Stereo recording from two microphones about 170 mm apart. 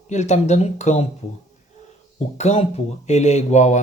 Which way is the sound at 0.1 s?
45° left (ahead or behind).